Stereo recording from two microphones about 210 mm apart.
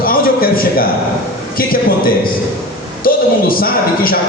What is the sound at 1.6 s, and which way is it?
Speech, 45° left (ahead or behind).